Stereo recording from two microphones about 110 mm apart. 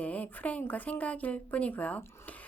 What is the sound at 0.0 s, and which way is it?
A woman's voice, 15° left (ahead or behind).